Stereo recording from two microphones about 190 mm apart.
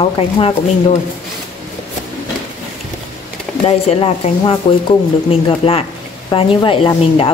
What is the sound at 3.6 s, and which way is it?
A woman's voice, 30° left (ahead or behind).